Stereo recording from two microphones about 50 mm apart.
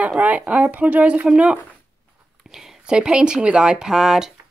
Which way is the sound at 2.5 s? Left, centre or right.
Centre.